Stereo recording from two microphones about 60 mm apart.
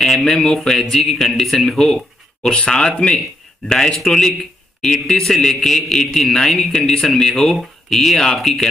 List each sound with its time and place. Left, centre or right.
0.0 s a man's voice: centre